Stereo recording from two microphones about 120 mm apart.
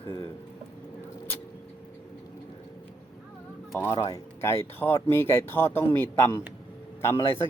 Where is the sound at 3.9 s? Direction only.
40° left (ahead or behind).